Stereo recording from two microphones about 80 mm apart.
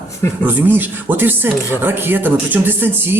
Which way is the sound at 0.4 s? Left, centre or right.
Right.